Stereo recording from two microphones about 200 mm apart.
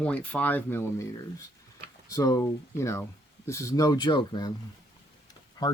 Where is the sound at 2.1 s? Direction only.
20° left (ahead or behind).